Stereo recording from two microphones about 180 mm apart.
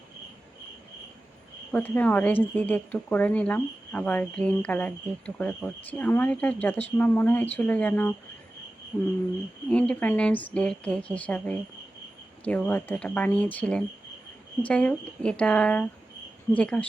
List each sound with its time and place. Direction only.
1.7 s speech: 10° left (ahead or behind)
9.6 s speech: 5° left (ahead or behind)